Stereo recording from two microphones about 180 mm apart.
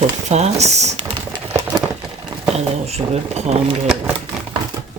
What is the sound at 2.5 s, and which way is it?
Speech, 35° right (ahead or behind).